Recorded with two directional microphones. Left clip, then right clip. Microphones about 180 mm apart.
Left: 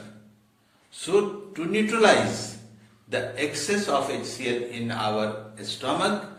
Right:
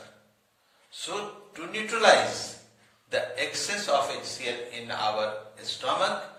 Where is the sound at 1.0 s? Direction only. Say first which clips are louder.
Left 11 dB; 20° left (ahead or behind).